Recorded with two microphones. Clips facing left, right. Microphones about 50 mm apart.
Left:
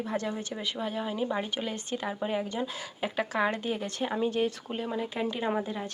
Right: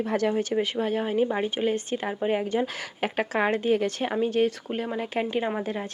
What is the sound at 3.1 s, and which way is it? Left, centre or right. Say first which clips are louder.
Speech: right 3 dB; right.